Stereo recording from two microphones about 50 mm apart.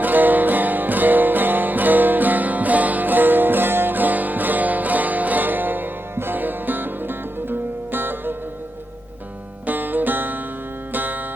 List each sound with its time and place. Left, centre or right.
0.0 s music: right
9.6 s music: right